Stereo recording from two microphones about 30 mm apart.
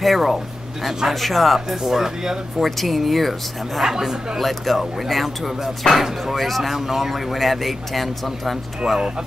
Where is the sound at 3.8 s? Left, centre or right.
Centre.